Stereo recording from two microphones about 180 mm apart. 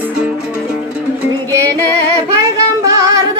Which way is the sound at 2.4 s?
20° right (ahead or behind).